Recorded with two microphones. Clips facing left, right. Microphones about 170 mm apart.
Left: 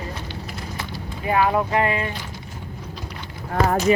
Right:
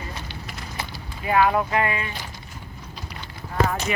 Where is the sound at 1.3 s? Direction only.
25° left (ahead or behind).